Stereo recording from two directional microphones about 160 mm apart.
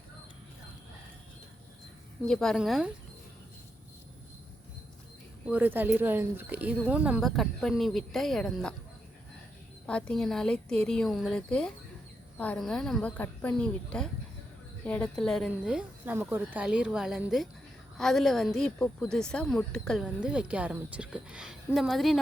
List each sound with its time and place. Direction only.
2.2 s a woman's voice: 5° left (ahead or behind)
5.5 s speech: 10° right (ahead or behind)
9.8 s a woman's voice: 5° left (ahead or behind)